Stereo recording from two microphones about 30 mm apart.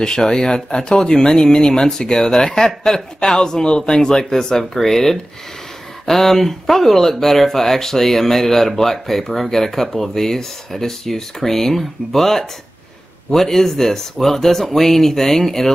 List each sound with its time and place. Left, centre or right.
0.0 s speech: left